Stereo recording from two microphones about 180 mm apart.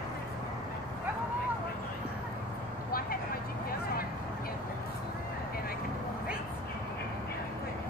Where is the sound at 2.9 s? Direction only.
55° left (ahead or behind).